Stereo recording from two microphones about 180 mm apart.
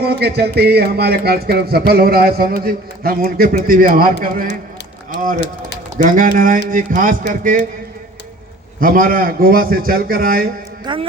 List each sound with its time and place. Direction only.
0.0 s speech: 65° right (ahead or behind)
6.1 s a man's voice: 50° right (ahead or behind)
8.8 s a man's voice: 50° right (ahead or behind)
10.9 s speech: 25° right (ahead or behind)